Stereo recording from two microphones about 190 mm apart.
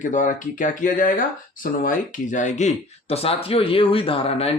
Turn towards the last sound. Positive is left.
turn(degrees=30)  # may be behind; listen again after turning